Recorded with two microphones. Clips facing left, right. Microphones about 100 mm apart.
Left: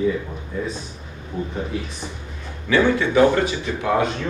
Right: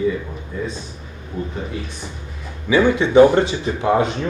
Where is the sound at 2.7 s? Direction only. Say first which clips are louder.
Right 4 dB; 15° right (ahead or behind).